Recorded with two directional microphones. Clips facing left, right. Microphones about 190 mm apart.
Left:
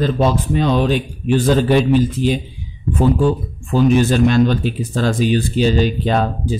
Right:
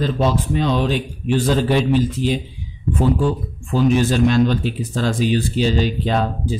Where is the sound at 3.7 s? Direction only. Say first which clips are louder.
Left 3 dB; 55° left (ahead or behind).